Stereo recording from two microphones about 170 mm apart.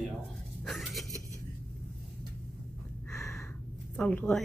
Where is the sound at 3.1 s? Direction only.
15° left (ahead or behind).